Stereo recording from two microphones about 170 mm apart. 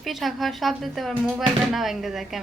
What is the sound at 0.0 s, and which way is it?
Speech, centre (ahead or behind).